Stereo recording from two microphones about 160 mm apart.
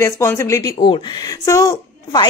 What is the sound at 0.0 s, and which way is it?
A woman's voice, 15° left (ahead or behind).